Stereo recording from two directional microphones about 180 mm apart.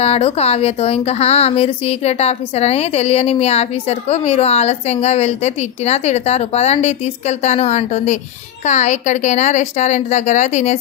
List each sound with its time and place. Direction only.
0.0 s a woman's voice: 35° left (ahead or behind)